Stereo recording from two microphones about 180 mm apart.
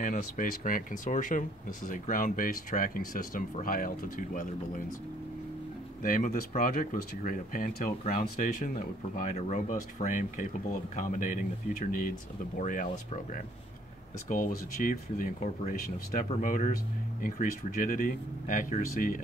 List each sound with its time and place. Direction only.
0.0 s speech: 45° left (ahead or behind)
6.0 s speech: 50° left (ahead or behind)
14.3 s speech: 50° left (ahead or behind)